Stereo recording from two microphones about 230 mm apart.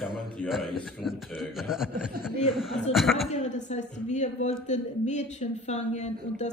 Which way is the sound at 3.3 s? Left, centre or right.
Left.